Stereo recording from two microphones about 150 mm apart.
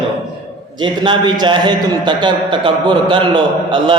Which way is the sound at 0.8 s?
30° right (ahead or behind).